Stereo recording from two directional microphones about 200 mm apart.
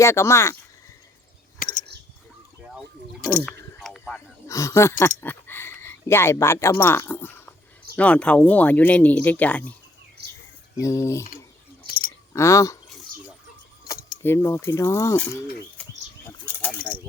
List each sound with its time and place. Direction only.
0.0 s speech: 15° left (ahead or behind)
3.4 s a sound: 15° left (ahead or behind)
3.8 s a sound: centre (ahead or behind)
4.4 s speech: 15° left (ahead or behind)
10.2 s bird: 55° right (ahead or behind)
10.8 s speech: 15° left (ahead or behind)
12.3 s speech: 15° left (ahead or behind)
14.2 s speech: 10° left (ahead or behind)
16.5 s pulleys: 5° left (ahead or behind)